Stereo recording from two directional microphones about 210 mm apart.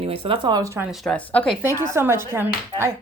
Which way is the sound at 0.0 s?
25° right (ahead or behind).